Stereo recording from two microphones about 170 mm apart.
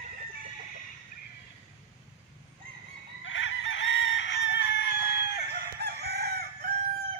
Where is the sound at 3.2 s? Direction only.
90° left.